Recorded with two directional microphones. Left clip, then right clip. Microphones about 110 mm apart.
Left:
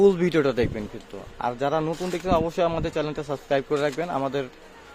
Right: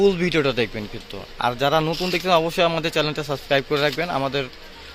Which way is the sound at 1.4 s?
10° left (ahead or behind).